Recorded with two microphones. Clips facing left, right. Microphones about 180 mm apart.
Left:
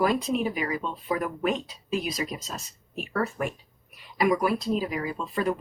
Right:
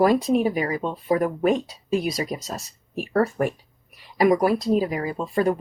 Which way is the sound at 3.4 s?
45° right (ahead or behind).